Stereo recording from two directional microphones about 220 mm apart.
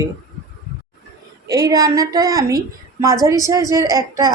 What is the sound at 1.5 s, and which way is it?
A woman's voice, 15° right (ahead or behind).